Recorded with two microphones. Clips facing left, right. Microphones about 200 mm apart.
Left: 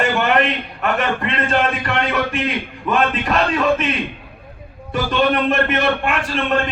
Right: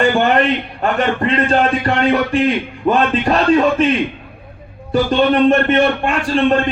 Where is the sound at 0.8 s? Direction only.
35° right (ahead or behind).